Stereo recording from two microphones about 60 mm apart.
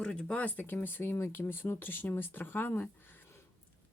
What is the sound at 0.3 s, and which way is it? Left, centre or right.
Speech, left.